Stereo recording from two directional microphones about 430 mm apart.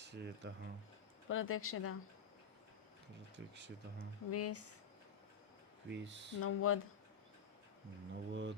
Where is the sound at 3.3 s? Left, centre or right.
Right.